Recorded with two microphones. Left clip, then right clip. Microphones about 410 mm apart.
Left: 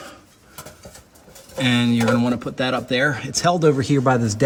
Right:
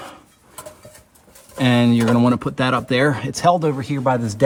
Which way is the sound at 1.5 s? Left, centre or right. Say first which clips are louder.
Right 2 dB; centre.